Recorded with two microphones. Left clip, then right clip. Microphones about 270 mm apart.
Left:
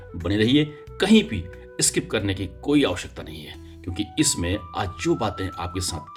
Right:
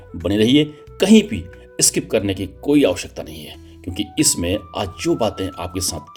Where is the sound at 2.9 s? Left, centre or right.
Left.